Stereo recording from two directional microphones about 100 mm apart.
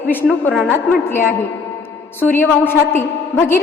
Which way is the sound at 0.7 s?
20° left (ahead or behind).